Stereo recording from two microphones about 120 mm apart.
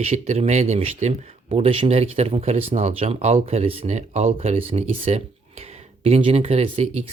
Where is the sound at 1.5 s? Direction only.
50° right (ahead or behind).